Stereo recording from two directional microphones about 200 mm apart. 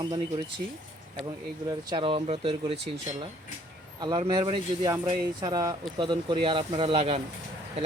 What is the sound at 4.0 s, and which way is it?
Speech, 20° right (ahead or behind).